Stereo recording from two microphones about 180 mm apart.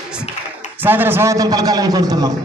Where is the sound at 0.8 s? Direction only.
10° right (ahead or behind).